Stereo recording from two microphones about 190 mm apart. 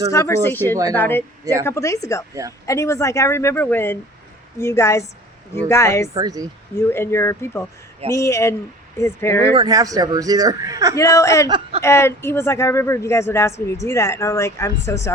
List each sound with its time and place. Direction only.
0.1 s speech: 15° left (ahead or behind)
6.1 s speech: 20° right (ahead or behind)
6.7 s speech: 15° left (ahead or behind)
9.6 s speech: 20° right (ahead or behind)
10.9 s speech: 15° left (ahead or behind)
11.4 s speech: 25° right (ahead or behind)
11.8 s speech: 15° left (ahead or behind)